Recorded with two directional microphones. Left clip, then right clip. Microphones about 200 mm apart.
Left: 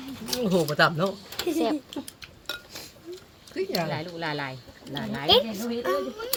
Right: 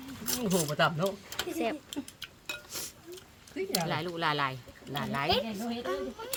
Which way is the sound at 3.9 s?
65° right (ahead or behind).